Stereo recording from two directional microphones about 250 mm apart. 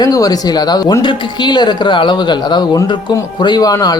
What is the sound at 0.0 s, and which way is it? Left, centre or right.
Speech, centre.